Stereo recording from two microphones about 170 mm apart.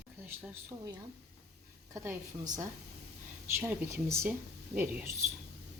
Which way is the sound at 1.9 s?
20° right (ahead or behind).